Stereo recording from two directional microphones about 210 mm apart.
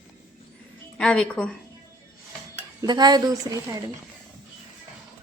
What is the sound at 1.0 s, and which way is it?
Speech, 5° left (ahead or behind).